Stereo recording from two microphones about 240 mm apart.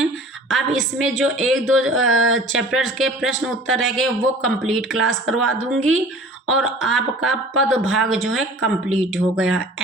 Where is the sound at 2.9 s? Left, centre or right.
Centre.